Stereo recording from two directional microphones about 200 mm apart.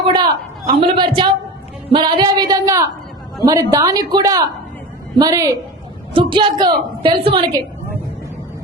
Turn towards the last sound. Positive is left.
turn(degrees=-25)  # may be behind; listen again after turning